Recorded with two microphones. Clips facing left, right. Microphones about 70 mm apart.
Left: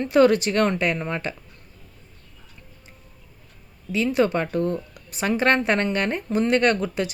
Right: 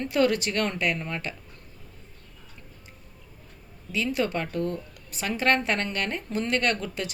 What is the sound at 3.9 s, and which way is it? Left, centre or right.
A woman's voice, left.